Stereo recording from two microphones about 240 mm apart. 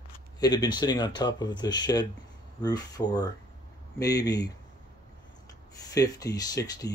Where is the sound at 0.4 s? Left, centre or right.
Centre.